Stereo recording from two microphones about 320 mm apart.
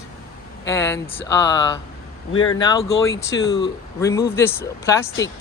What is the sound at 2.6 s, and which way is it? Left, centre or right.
Speech, centre.